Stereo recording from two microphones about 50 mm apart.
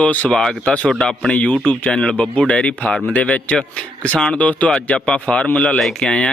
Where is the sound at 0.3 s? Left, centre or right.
Centre.